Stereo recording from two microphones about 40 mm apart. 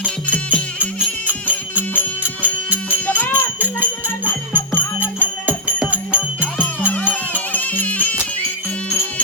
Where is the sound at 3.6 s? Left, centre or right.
Right.